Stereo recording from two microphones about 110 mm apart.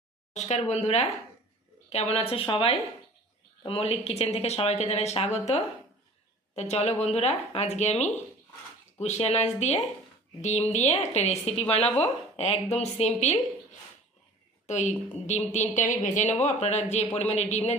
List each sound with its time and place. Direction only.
0.3 s a woman's voice: 85° left
14.7 s a woman's voice: 90° left